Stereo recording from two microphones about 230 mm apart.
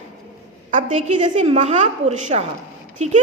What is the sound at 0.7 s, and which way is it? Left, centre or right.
A woman's voice, right.